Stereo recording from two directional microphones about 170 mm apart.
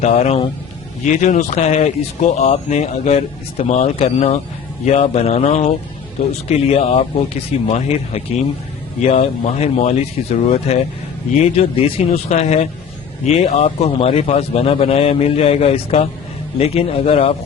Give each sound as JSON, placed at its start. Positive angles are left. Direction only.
{"t": 0.0, "sound": "speech", "side_deg": 40}